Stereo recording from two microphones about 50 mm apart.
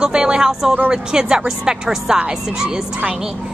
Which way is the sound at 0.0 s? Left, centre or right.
Centre.